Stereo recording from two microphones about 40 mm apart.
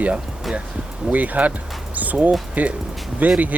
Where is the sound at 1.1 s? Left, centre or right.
Right.